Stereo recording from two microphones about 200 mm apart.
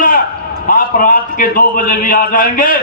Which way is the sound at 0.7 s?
45° left (ahead or behind).